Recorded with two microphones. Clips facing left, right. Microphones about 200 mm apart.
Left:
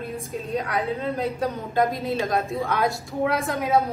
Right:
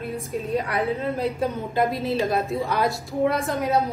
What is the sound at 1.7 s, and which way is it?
A woman's voice, 5° right (ahead or behind).